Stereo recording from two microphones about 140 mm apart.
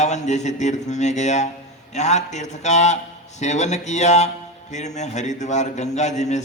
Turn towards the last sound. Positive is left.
turn(degrees=55)  # may be behind; listen again after turning